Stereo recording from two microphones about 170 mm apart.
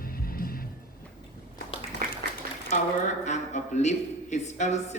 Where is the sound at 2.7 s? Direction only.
40° left (ahead or behind).